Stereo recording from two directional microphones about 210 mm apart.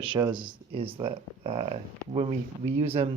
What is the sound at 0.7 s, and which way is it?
Speech, 25° right (ahead or behind).